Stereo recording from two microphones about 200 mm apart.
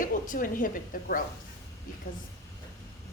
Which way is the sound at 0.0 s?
45° left (ahead or behind).